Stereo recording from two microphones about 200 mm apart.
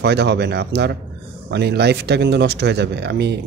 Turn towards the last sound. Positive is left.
turn(degrees=-55)  # may be behind; listen again after turning